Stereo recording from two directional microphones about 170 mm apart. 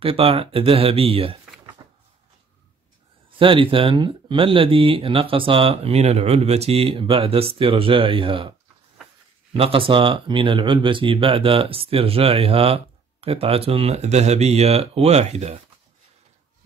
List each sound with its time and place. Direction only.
0.0 s speech: 30° right (ahead or behind)
1.8 s a sound: 25° right (ahead or behind)
3.3 s speech: 30° right (ahead or behind)